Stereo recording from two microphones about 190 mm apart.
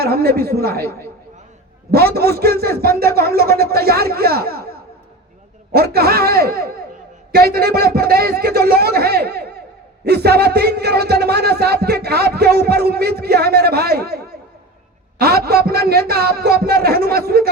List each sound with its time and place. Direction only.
0.0 s a man's voice: 55° right (ahead or behind)
0.9 s speech: 15° left (ahead or behind)
1.9 s a man's voice: 55° right (ahead or behind)
5.7 s a man's voice: 55° right (ahead or behind)